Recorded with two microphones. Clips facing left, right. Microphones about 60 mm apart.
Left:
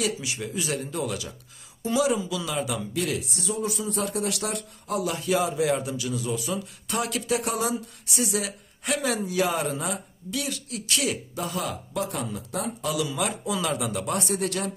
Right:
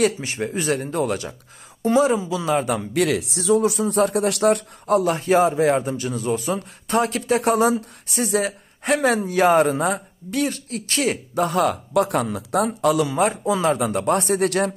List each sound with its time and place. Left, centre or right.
0.0 s speech: right
2.9 s speech: right